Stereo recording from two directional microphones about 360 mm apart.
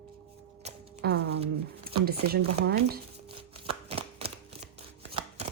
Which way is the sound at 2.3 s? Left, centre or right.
Right.